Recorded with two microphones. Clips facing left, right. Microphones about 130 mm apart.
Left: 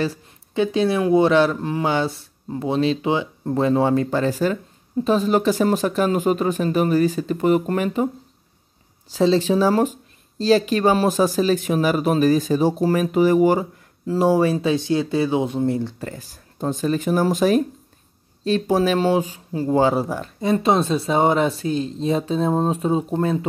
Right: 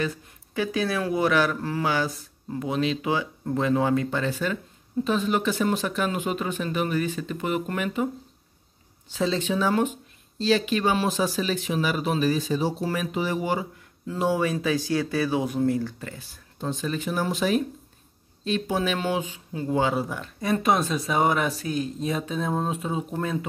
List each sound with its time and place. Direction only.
0.0 s speech: 30° left (ahead or behind)
9.1 s speech: 35° left (ahead or behind)
16.0 s speech: 40° left (ahead or behind)
20.3 s speech: 25° left (ahead or behind)